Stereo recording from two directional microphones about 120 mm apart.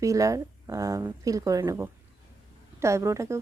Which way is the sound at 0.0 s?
25° right (ahead or behind).